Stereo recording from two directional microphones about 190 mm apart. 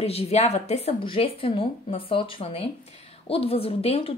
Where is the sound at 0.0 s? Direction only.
35° left (ahead or behind).